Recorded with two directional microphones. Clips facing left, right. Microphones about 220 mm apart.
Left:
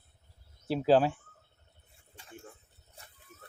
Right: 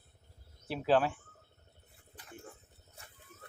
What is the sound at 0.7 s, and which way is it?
Speech, 30° left (ahead or behind).